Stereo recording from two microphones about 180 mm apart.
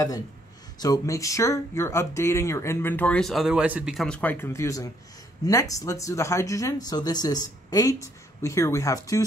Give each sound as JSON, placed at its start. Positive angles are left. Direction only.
{"t": 0.7, "sound": "speech", "side_deg": 20}